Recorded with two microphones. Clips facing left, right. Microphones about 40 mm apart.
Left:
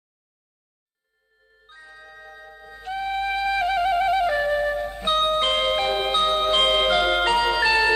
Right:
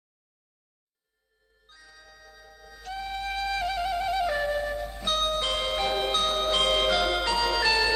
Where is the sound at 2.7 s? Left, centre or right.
Left.